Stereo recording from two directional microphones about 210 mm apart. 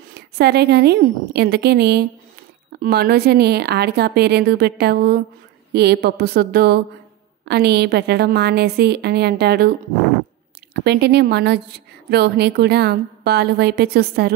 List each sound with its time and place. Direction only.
0.4 s a woman's voice: 50° right (ahead or behind)